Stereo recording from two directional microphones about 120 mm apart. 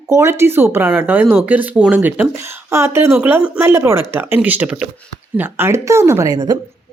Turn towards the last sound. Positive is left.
turn(degrees=-30)  # may be behind; listen again after turning